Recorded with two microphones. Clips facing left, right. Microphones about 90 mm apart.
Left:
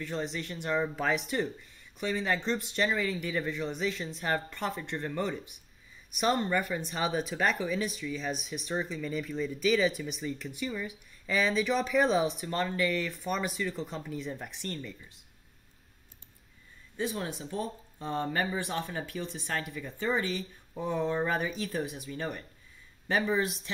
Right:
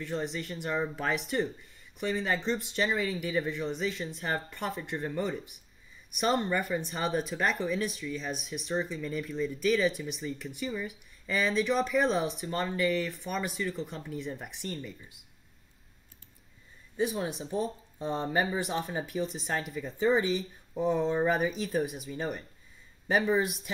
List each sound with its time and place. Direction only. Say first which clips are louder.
0.0 s speech: right 1 dB; centre (ahead or behind)
16.9 s speech: right 3 dB; 15° right (ahead or behind)